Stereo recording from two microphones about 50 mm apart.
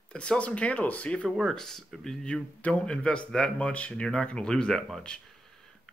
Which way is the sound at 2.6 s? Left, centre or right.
Centre.